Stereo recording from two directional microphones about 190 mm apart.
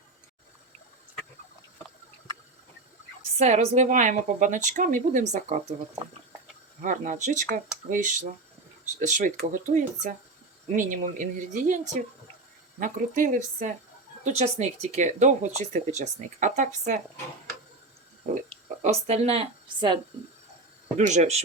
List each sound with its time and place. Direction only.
3.3 s speech: 35° right (ahead or behind)
6.8 s speech: 45° right (ahead or behind)
12.8 s speech: 45° right (ahead or behind)
18.3 s a sound: 40° right (ahead or behind)
18.8 s speech: 35° right (ahead or behind)
21.0 s speech: 40° right (ahead or behind)